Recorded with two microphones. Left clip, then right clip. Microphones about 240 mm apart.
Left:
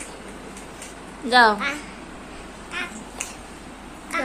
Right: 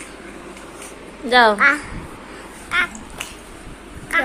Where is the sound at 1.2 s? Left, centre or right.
Centre.